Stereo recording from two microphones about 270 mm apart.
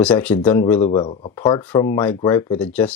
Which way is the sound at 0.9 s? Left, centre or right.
Centre.